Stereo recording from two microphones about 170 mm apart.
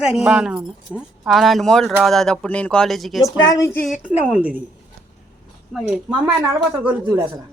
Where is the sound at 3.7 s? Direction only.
50° left (ahead or behind).